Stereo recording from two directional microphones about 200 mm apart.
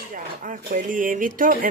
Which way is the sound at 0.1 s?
40° right (ahead or behind).